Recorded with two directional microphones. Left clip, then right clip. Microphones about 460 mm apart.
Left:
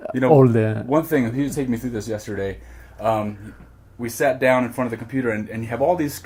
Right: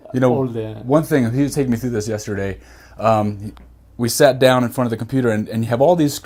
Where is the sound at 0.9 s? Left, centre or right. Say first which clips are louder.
Right 6 dB; right.